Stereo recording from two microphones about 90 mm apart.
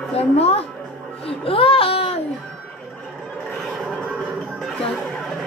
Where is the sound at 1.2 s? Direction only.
90° left.